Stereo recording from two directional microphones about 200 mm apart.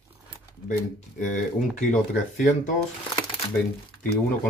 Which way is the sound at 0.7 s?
40° left (ahead or behind).